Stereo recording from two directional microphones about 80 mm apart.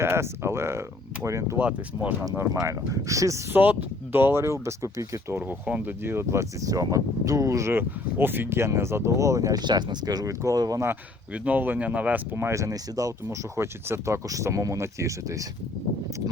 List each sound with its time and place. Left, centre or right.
0.0 s speech: right
1.5 s speech: centre
2.5 s speech: right
3.5 s speech: right
5.4 s speech: centre
6.0 s speech: right
6.7 s speech: right
7.7 s speech: right
9.6 s speech: right
11.3 s speech: centre; by 13.1 s right
13.2 s speech: right